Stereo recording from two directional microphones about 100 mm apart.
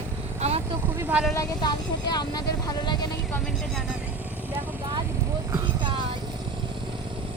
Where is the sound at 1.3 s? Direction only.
40° left (ahead or behind).